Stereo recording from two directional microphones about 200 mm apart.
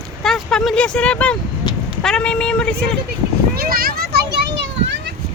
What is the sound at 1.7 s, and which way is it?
Vehicle, 20° left (ahead or behind).